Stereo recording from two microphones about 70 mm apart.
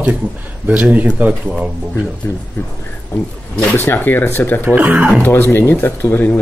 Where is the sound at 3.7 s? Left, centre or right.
Left.